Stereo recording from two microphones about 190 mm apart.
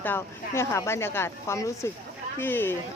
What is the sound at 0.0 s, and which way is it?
A woman's voice, 10° left (ahead or behind).